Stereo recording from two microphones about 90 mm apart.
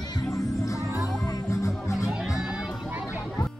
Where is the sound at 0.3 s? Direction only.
35° left (ahead or behind).